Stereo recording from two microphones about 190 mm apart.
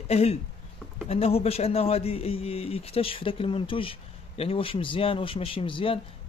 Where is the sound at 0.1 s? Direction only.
35° left (ahead or behind).